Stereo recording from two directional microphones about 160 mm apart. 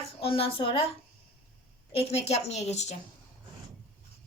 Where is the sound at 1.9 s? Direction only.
40° left (ahead or behind).